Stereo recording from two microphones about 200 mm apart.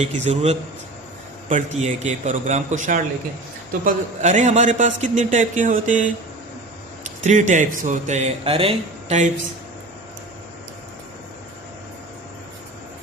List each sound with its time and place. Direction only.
0.0 s a man's voice: 35° right (ahead or behind)
7.3 s a man's voice: 40° right (ahead or behind)